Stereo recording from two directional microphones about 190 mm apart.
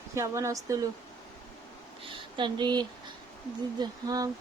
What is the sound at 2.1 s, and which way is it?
Speech, 25° right (ahead or behind).